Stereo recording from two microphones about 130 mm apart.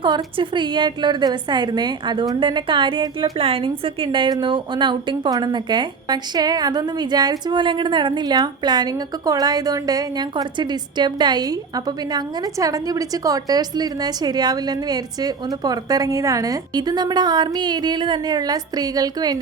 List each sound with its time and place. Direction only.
0.0 s a woman's voice: 40° right (ahead or behind)